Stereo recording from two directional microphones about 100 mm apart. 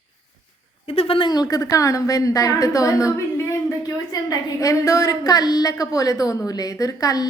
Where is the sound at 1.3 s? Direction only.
40° left (ahead or behind).